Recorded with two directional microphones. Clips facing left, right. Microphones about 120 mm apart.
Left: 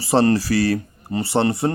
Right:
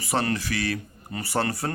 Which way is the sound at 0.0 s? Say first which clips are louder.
Left 9 dB; 30° left (ahead or behind).